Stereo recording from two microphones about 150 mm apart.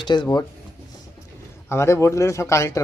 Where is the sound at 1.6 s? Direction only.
15° left (ahead or behind).